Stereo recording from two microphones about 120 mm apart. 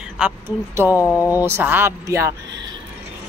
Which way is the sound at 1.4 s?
20° right (ahead or behind).